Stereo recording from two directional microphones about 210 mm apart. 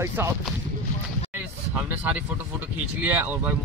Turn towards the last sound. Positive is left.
turn(degrees=-10)  # may be behind; listen again after turning